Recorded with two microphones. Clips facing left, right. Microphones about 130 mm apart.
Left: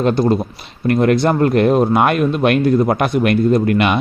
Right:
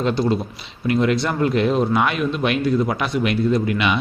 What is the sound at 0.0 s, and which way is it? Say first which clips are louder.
Speech: left 5 dB; 50° left (ahead or behind).